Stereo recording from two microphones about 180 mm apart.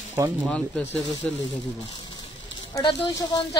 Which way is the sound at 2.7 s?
20° left (ahead or behind).